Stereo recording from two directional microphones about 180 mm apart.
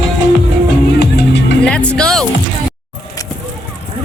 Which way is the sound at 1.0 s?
65° left (ahead or behind).